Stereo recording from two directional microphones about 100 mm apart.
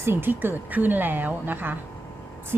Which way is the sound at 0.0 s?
20° right (ahead or behind).